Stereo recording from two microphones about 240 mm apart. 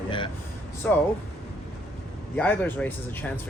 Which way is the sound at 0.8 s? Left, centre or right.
Centre.